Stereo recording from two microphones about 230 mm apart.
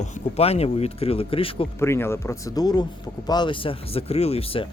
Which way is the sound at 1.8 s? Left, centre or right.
Centre.